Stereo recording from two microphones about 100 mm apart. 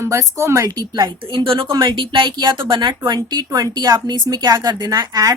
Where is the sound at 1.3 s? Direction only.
60° right (ahead or behind); by 5.3 s 40° right (ahead or behind).